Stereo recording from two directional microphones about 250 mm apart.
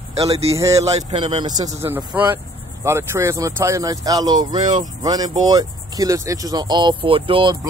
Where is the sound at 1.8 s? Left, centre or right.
Centre.